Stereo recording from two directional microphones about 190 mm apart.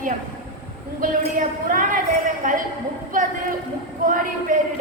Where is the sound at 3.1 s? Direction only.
45° right (ahead or behind).